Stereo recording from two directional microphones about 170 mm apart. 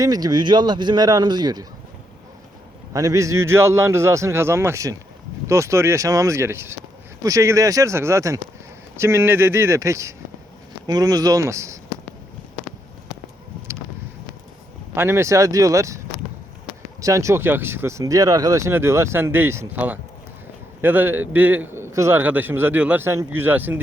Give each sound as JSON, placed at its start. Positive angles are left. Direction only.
{"t": 0.0, "sound": "speech", "side_deg": -20}
{"t": 2.9, "sound": "speech", "side_deg": -20}
{"t": 14.9, "sound": "speech", "side_deg": -15}
{"t": 17.0, "sound": "speech", "side_deg": -20}